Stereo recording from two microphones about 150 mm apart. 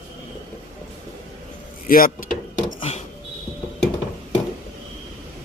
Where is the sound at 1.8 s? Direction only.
70° left (ahead or behind).